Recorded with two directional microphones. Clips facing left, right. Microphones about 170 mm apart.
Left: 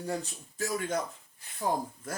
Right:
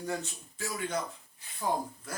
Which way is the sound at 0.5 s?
45° left (ahead or behind).